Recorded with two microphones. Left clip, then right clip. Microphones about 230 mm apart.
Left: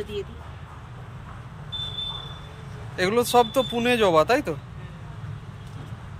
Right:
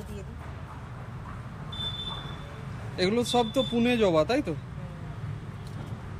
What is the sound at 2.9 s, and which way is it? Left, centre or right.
A man's voice, centre.